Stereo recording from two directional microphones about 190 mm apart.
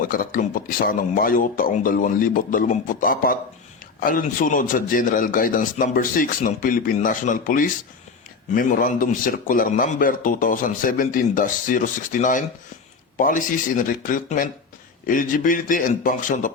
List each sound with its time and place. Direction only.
0.1 s a man's voice: 50° left (ahead or behind)